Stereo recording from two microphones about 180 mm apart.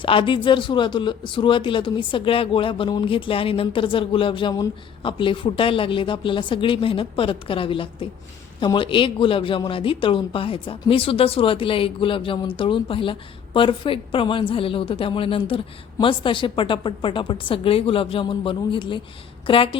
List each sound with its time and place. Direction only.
0.0 s speech: 30° left (ahead or behind)